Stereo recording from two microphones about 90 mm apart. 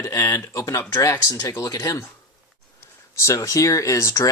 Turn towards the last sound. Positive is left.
turn(degrees=35)  # may be behind; listen again after turning